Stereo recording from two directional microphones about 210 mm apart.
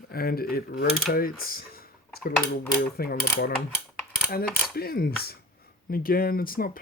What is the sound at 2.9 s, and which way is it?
Speech, 45° left (ahead or behind).